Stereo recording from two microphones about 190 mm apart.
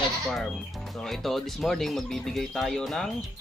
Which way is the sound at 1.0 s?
Centre (ahead or behind).